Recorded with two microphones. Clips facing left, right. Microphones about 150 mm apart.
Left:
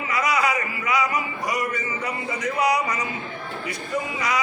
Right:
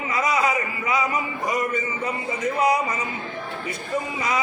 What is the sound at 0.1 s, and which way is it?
Speech, 25° right (ahead or behind).